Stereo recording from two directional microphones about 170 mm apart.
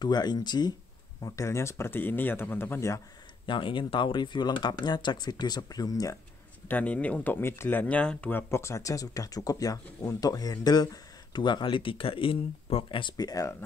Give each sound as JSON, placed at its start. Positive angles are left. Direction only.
{"t": 0.0, "sound": "speech", "side_deg": 25}
{"t": 3.4, "sound": "speech", "side_deg": 30}
{"t": 6.7, "sound": "speech", "side_deg": 10}